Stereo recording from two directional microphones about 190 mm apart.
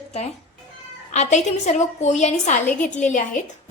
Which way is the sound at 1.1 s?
40° left (ahead or behind).